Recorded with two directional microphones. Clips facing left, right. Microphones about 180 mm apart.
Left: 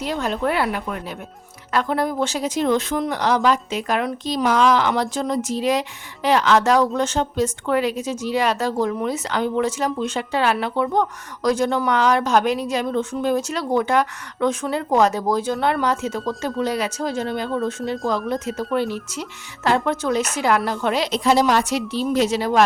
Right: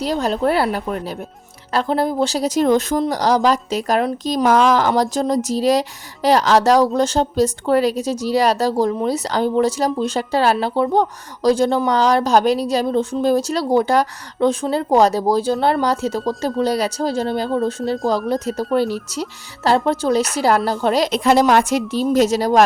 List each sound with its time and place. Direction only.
0.0 s a woman's voice: 35° right (ahead or behind)
21.1 s a woman's voice: 55° right (ahead or behind); by 22.6 s 40° right (ahead or behind)